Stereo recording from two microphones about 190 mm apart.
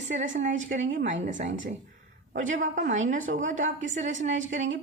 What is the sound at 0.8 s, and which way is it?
Speech, 75° right (ahead or behind).